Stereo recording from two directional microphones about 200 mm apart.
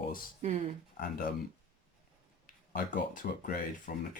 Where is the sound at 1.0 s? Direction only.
45° left (ahead or behind).